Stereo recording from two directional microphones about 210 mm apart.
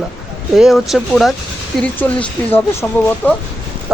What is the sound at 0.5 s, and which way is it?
Speech, centre (ahead or behind).